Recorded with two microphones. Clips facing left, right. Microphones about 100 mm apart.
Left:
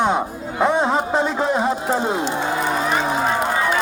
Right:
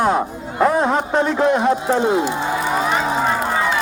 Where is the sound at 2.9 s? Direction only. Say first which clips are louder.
Right 1 dB; centre (ahead or behind).